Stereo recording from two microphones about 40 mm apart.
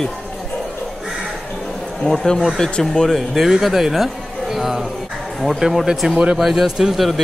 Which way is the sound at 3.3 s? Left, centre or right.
Centre.